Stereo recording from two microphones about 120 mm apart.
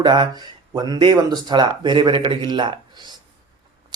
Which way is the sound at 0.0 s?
35° right (ahead or behind).